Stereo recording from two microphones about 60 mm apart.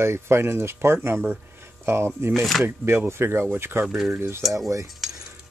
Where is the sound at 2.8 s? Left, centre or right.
Right.